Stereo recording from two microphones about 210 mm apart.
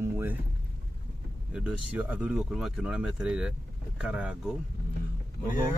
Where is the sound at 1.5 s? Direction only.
5° right (ahead or behind).